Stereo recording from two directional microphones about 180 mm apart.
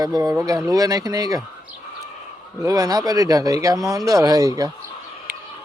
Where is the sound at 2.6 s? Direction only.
20° right (ahead or behind).